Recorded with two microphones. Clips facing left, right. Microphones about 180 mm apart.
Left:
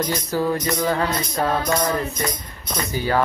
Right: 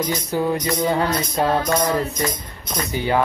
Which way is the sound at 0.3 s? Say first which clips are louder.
Right 1 dB; 20° right (ahead or behind).